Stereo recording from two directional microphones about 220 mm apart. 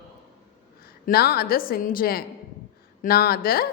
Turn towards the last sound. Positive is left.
turn(degrees=45)  # may be behind; listen again after turning